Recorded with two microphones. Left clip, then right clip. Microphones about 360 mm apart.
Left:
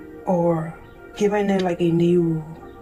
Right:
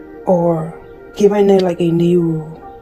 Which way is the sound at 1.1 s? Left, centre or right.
Right.